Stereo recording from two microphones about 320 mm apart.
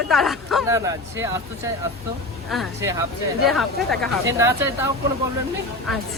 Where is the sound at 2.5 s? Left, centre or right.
Centre.